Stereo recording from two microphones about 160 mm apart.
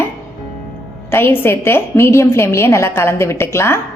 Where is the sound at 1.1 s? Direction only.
15° left (ahead or behind).